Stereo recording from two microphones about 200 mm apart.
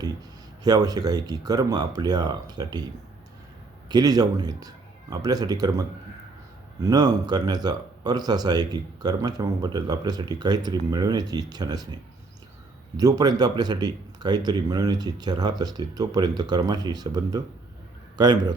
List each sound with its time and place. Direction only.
0.0 s speech: 20° right (ahead or behind)
3.8 s speech: 20° right (ahead or behind)
6.8 s speech: 20° right (ahead or behind)
13.0 s speech: 20° right (ahead or behind)